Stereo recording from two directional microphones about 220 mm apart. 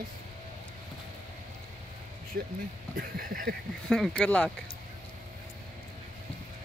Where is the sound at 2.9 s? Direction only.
40° right (ahead or behind).